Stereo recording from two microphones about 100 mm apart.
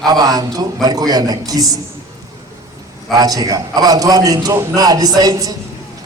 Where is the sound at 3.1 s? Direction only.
40° right (ahead or behind).